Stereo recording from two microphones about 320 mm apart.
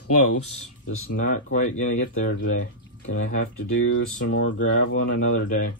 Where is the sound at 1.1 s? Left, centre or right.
Left.